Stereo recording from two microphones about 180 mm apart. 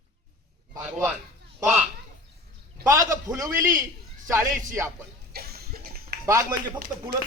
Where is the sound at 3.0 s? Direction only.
15° right (ahead or behind).